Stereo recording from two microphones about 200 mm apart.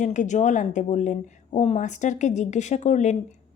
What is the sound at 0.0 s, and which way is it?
A woman's voice, 40° left (ahead or behind).